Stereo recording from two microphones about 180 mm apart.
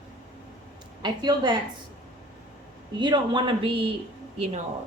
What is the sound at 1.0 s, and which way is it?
Speech, 25° right (ahead or behind).